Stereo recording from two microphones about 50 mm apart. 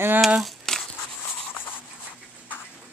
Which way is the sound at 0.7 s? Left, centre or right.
Centre.